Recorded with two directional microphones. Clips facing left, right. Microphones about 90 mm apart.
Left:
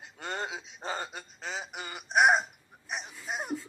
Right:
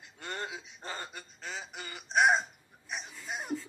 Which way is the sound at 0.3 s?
90° left.